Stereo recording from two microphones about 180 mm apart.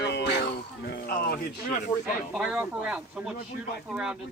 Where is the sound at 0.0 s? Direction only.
70° left (ahead or behind).